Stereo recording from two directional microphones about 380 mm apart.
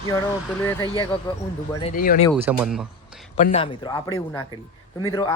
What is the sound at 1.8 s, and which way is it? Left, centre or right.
Speech, centre.